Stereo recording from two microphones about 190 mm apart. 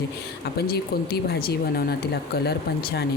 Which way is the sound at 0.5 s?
55° left (ahead or behind).